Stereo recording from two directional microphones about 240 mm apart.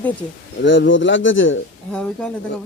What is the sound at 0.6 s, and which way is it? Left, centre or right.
Speech, left.